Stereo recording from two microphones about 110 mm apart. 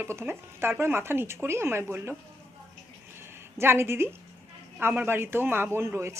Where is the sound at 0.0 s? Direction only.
25° right (ahead or behind).